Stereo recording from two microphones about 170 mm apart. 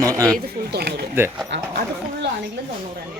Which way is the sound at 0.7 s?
70° right (ahead or behind).